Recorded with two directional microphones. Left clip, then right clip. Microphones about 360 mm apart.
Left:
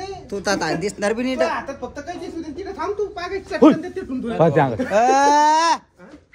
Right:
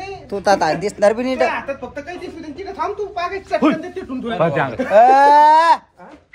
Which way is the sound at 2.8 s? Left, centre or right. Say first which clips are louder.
Right 3 dB; centre.